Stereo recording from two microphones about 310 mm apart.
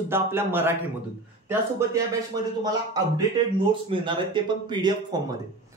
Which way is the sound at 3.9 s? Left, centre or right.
Centre.